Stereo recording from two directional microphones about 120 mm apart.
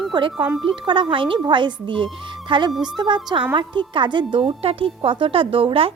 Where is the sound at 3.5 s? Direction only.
40° right (ahead or behind).